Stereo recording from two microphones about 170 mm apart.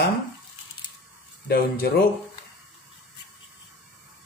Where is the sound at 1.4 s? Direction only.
65° left (ahead or behind).